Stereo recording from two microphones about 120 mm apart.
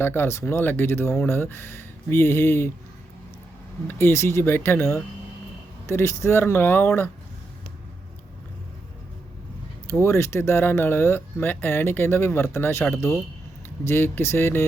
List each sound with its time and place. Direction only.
0.0 s speech: 20° left (ahead or behind)
3.8 s speech: 20° left (ahead or behind)
9.9 s speech: 20° left (ahead or behind)